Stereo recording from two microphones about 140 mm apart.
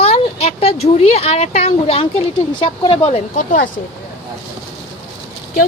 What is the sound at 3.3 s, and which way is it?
Speech, 70° left (ahead or behind).